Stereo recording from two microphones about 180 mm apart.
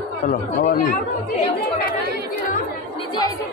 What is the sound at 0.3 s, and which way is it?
Speech, 55° left (ahead or behind).